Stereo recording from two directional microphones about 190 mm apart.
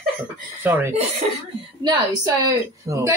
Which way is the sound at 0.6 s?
10° right (ahead or behind).